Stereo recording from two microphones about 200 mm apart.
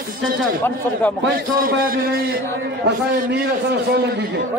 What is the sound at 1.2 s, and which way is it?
A man's voice, 50° right (ahead or behind).